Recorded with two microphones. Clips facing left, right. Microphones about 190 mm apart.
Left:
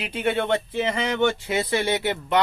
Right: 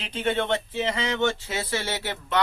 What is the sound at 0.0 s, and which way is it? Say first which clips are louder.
A man's voice: left 2 dB; 10° left (ahead or behind).